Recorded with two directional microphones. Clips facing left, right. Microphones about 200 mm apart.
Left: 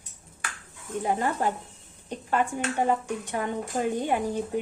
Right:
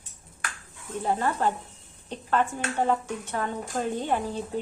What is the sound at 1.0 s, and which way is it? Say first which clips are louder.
A woman's voice: right 1 dB; 15° left (ahead or behind).